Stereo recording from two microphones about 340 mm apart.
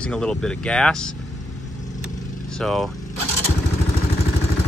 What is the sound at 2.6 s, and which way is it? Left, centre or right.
Speech, centre.